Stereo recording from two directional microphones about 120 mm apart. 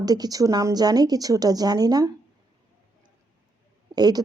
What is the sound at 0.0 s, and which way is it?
A woman's voice, 35° right (ahead or behind).